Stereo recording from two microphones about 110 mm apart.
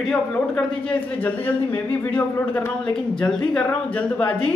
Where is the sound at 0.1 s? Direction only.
5° left (ahead or behind).